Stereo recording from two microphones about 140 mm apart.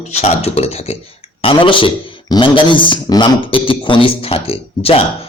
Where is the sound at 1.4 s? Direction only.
35° left (ahead or behind).